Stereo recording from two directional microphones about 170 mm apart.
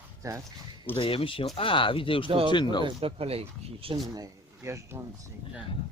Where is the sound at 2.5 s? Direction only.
25° left (ahead or behind).